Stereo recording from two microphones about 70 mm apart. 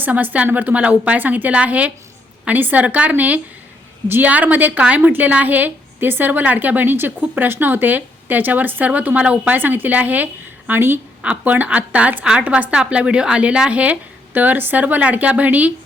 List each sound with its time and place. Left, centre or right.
0.0 s a woman's voice: right
9.6 s a woman's voice: right